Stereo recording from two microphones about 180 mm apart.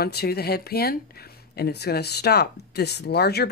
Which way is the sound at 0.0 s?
60° left (ahead or behind).